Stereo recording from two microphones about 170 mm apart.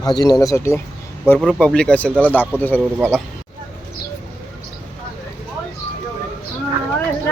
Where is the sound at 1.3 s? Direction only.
5° left (ahead or behind).